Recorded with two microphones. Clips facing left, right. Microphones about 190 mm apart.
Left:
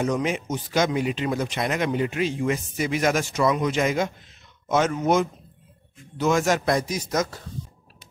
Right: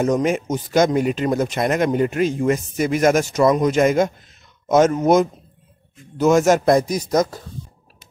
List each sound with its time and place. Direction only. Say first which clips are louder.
0.0 s speech: right 6 dB; 45° right (ahead or behind)